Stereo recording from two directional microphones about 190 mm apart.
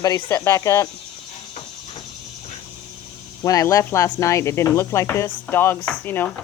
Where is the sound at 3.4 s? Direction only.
15° left (ahead or behind).